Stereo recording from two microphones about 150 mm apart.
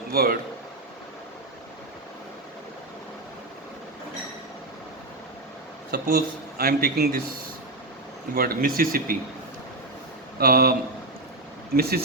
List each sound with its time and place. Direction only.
0.1 s a man's voice: 90° right
5.9 s speech: 90° right
8.4 s speech: 80° right
10.4 s speech: 90° right
11.8 s speech: 90° right